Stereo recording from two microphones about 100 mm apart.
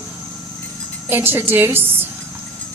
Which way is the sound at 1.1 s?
20° right (ahead or behind).